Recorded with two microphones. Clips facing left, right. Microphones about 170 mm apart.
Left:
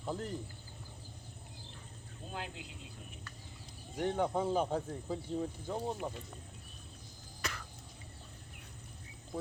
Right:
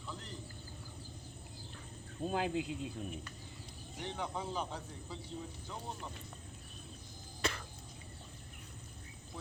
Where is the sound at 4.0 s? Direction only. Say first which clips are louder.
Left 8 dB; 50° left (ahead or behind).